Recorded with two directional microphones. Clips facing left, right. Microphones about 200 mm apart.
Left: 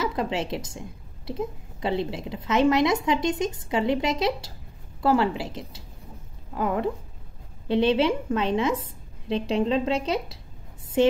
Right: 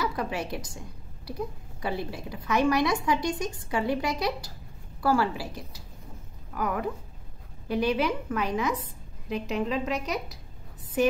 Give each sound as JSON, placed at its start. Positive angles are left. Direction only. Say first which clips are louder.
{"t": 0.0, "sound": "a woman's voice", "louder": "left 3 dB", "side_deg": 25}